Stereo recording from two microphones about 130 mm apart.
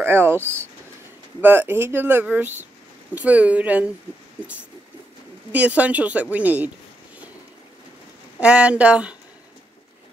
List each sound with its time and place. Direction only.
0.0 s speech: 15° right (ahead or behind)
5.5 s speech: 10° right (ahead or behind)
8.4 s speech: 10° right (ahead or behind)